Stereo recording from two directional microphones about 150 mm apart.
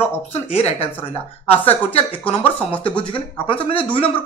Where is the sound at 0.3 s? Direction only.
40° left (ahead or behind).